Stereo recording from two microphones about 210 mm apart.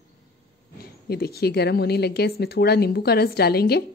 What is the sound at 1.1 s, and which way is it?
A woman's voice, 50° left (ahead or behind).